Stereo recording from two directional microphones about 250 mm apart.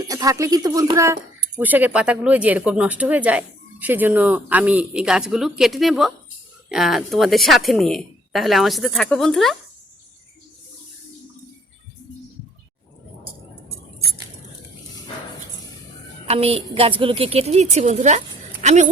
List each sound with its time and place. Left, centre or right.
0.1 s a woman's voice: centre
16.2 s a woman's voice: right